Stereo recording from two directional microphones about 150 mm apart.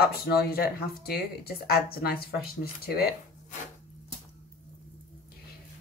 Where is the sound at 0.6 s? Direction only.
90° left.